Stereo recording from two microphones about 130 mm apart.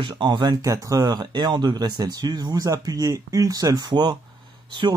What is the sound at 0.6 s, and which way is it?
Speech, 25° right (ahead or behind).